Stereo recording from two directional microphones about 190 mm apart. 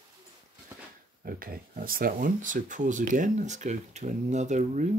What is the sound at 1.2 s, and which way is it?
Speech, 50° right (ahead or behind).